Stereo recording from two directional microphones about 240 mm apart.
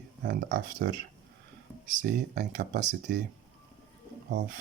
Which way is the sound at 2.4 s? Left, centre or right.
Right.